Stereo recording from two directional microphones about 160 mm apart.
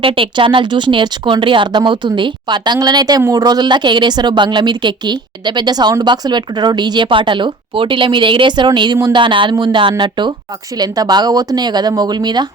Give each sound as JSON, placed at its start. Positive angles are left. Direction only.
{"t": 0.0, "sound": "speech", "side_deg": -35}